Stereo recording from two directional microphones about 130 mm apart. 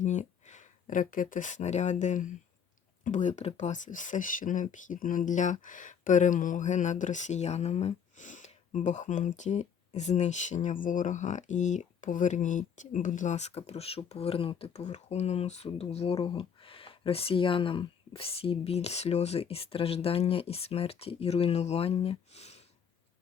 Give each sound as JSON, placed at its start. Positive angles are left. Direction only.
{"t": 0.0, "sound": "speech", "side_deg": 65}